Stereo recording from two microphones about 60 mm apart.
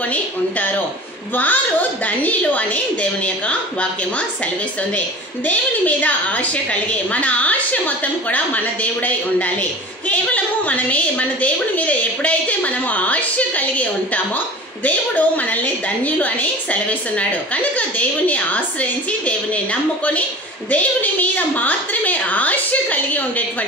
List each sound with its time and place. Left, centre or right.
1.3 s a woman's voice: left
5.5 s a woman's voice: left
17.7 s a woman's voice: left